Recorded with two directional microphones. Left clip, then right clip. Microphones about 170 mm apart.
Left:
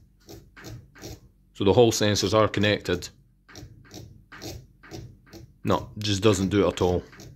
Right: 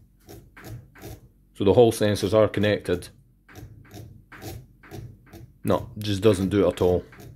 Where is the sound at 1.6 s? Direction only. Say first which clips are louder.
Right 2 dB; 5° right (ahead or behind).